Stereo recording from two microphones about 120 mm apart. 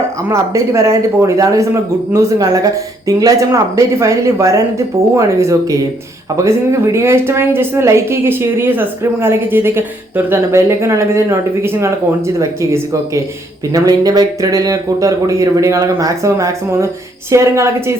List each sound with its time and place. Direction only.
0.3 s speech: 25° right (ahead or behind)